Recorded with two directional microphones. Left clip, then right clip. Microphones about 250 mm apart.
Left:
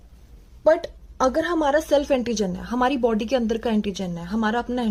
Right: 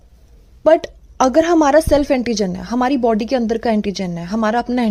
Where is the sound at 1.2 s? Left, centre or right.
Right.